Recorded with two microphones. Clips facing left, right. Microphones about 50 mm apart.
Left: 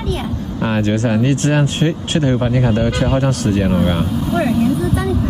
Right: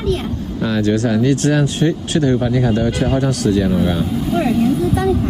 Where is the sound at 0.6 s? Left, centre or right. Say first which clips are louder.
Right 1 dB; left.